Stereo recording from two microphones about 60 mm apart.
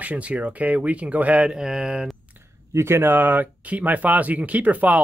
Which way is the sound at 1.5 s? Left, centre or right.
Centre.